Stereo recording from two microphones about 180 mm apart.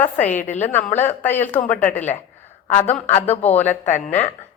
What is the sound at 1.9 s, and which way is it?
Speech, 40° left (ahead or behind).